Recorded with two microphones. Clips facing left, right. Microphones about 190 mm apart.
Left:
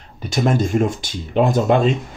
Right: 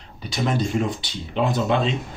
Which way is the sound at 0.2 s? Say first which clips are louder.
Left 5 dB; 45° left (ahead or behind).